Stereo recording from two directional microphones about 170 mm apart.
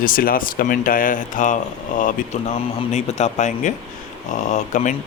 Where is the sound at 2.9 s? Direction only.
40° left (ahead or behind).